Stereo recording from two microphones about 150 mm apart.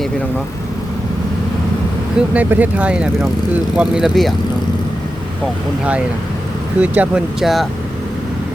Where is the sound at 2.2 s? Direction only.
10° right (ahead or behind).